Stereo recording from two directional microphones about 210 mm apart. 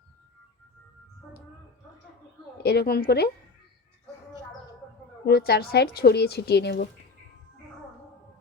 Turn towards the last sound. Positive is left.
turn(degrees=50)  # may be behind; listen again after turning